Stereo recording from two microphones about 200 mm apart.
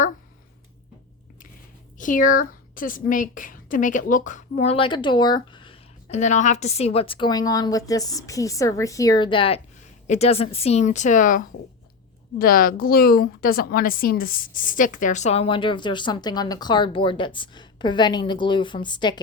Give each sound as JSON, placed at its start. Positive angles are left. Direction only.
{"t": 2.0, "sound": "a woman's voice", "side_deg": 40}